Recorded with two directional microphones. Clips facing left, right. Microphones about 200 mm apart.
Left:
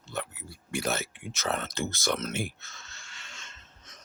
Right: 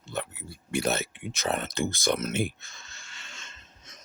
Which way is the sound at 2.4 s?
15° right (ahead or behind).